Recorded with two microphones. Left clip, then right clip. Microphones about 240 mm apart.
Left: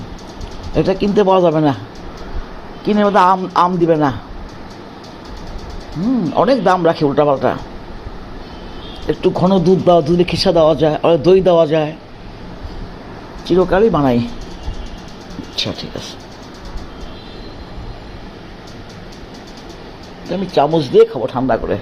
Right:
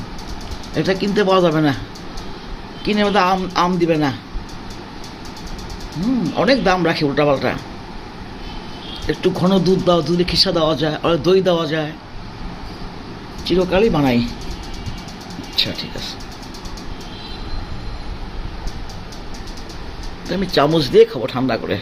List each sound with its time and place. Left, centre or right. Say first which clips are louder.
0.8 s speech: left 4 dB; centre
2.8 s speech: left 5 dB; centre
6.3 s speech: left 3 dB; centre
9.2 s speech: left 3 dB; centre
13.4 s speech: left 3 dB; centre
15.5 s speech: right 1 dB; left
20.3 s speech: left 2 dB; centre